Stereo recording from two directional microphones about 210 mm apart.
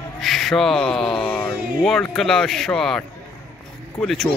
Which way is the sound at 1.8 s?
Centre (ahead or behind).